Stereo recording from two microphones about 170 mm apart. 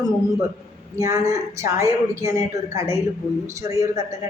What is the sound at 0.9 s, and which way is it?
A woman's voice, 15° right (ahead or behind).